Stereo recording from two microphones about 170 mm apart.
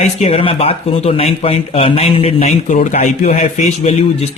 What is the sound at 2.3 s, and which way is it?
A man's voice, 50° left (ahead or behind).